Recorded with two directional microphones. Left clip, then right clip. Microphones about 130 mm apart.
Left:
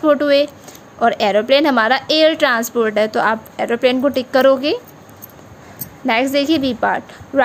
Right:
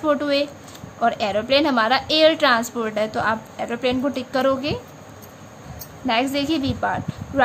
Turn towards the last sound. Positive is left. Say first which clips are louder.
# left 6 dB
turn(degrees=55)  # may be behind; listen again after turning